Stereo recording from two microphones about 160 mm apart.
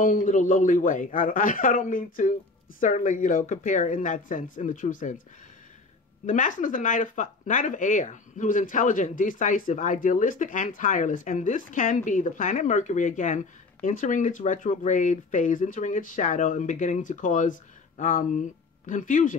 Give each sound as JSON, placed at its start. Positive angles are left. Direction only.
{"t": 0.0, "sound": "a man's voice", "side_deg": 55}
{"t": 6.2, "sound": "speech", "side_deg": 55}